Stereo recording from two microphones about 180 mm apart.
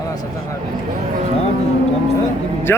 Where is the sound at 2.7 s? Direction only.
15° left (ahead or behind).